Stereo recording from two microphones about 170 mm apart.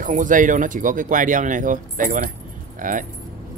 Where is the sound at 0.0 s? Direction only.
50° right (ahead or behind).